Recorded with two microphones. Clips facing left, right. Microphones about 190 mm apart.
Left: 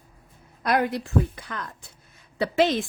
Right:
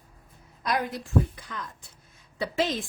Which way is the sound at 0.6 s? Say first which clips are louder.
Left 5 dB; 60° left (ahead or behind).